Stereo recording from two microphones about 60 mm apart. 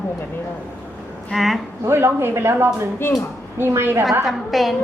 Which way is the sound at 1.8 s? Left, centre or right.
Right.